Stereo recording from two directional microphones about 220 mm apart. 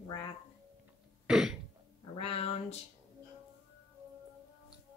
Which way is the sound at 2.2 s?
25° left (ahead or behind).